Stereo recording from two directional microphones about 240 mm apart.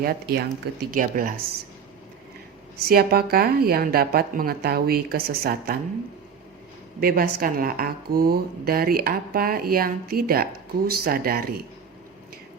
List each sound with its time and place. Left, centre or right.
0.0 s speech: right
2.7 s speech: right
7.0 s speech: right